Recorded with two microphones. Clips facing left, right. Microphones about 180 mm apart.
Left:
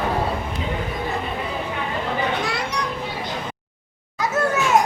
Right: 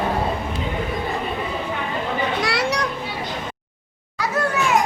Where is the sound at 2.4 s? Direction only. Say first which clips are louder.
Right 4 dB; 80° right.